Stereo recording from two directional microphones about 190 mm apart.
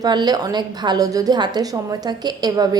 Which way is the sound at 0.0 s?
20° right (ahead or behind).